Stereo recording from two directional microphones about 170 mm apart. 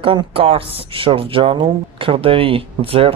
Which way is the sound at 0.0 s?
30° right (ahead or behind).